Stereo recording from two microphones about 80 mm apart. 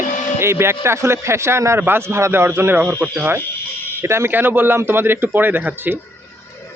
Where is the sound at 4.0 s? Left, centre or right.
Right.